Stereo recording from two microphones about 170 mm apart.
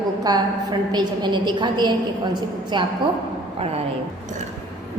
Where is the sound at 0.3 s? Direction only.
25° right (ahead or behind).